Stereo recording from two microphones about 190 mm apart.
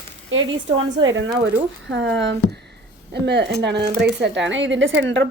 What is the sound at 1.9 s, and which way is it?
A woman's voice, 70° right (ahead or behind).